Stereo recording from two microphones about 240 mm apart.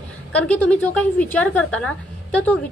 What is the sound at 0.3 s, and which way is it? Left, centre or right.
A woman's voice, centre.